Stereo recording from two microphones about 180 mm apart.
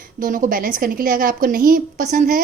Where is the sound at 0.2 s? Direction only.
50° right (ahead or behind).